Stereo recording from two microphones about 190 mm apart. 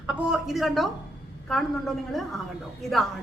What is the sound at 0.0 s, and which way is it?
A woman's voice, 5° right (ahead or behind).